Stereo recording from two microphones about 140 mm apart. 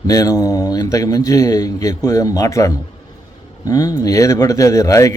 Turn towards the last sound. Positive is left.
turn(degrees=25)  # may be behind; listen again after turning